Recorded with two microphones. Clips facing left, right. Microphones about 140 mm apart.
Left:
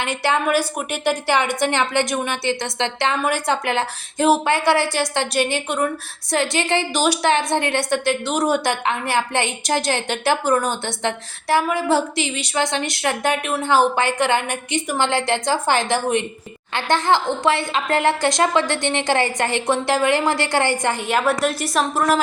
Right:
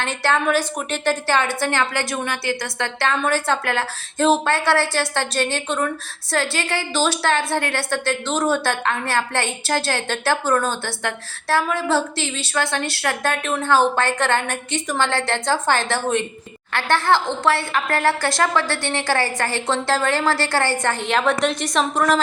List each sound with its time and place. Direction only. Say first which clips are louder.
0.0 s a woman's voice: even; 15° left (ahead or behind)